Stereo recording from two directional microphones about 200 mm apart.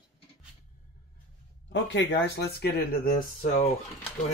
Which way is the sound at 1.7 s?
65° left (ahead or behind).